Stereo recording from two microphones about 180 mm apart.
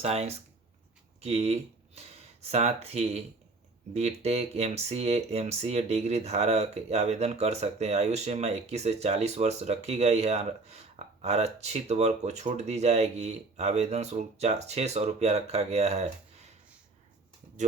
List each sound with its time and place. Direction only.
0.0 s speech: 35° right (ahead or behind)